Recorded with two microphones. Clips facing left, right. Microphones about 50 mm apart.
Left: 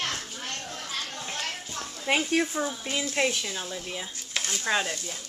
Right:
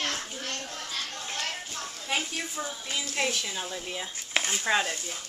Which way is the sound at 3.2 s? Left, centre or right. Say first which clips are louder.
Left 3 dB; centre.